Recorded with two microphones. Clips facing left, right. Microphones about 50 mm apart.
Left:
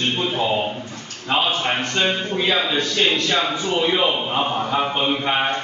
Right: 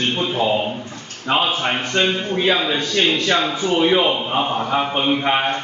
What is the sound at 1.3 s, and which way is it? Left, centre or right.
A man's voice, right.